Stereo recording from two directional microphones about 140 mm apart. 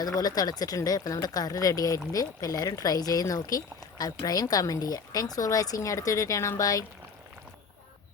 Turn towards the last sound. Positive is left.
turn(degrees=25)  # may be behind; listen again after turning